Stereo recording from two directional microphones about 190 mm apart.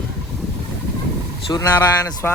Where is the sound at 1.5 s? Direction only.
15° left (ahead or behind).